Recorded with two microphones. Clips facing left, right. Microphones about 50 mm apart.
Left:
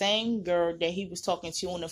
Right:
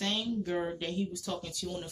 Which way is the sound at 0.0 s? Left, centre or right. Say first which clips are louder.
Left 5 dB; left.